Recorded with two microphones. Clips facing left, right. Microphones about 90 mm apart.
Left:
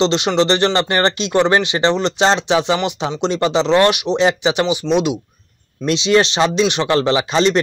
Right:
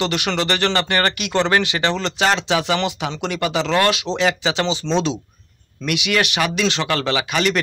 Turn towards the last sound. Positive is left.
turn(degrees=25)  # may be behind; listen again after turning